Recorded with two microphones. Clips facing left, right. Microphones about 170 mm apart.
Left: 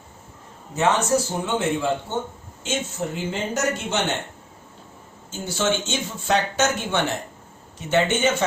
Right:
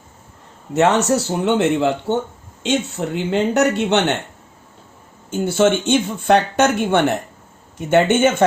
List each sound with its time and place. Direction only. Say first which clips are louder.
0.7 s speech: right 5 dB; 70° right (ahead or behind)
5.3 s speech: right 8 dB; 55° right (ahead or behind)